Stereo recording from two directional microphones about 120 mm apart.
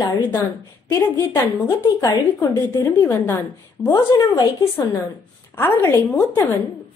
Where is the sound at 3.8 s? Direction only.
35° left (ahead or behind).